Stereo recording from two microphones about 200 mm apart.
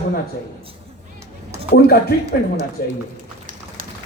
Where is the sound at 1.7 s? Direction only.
50° left (ahead or behind).